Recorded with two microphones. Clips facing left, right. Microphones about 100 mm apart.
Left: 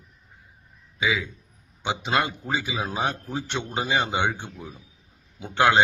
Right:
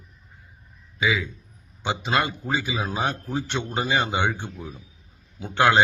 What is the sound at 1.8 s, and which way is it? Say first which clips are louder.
A man's voice: right 1 dB; 15° left (ahead or behind).